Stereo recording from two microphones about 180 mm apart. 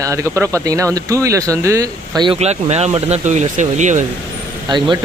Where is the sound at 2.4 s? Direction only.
35° right (ahead or behind).